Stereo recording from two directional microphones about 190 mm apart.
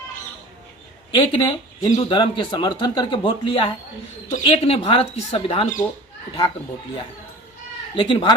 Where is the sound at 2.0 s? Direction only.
25° left (ahead or behind).